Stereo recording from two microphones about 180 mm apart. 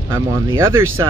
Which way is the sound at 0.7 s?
15° right (ahead or behind).